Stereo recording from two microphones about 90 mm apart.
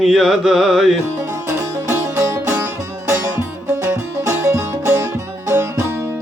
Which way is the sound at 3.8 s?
30° right (ahead or behind).